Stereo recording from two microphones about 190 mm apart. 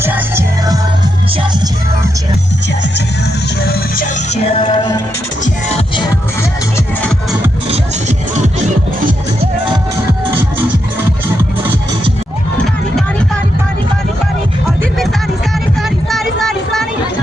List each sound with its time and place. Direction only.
0.0 s music: 10° right (ahead or behind)
3.6 s speech: 50° left (ahead or behind)
4.5 s music: 25° left (ahead or behind)
15.8 s a sound: centre (ahead or behind)